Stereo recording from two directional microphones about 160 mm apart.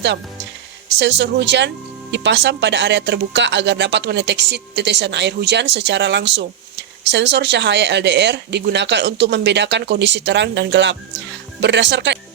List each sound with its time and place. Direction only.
0.9 s speech: 90° right